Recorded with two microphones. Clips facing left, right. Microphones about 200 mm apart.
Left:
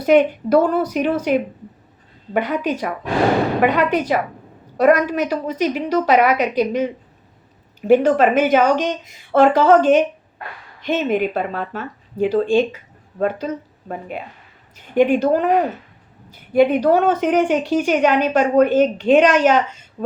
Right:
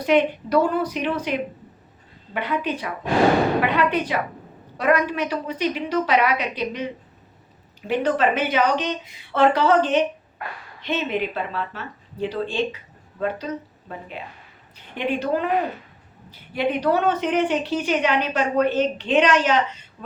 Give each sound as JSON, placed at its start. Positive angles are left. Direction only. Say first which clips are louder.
{"t": 0.0, "sound": "a woman's voice", "louder": "left 5 dB", "side_deg": 45}